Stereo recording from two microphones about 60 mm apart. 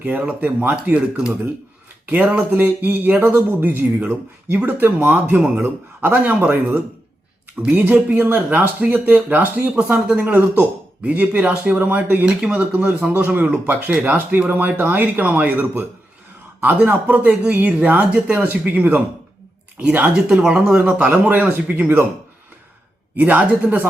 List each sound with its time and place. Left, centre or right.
0.0 s speech: right
2.0 s speech: right
5.2 s speech: right
9.7 s speech: centre
12.2 s speech: centre
12.5 s speech: right
20.4 s speech: centre
23.1 s speech: right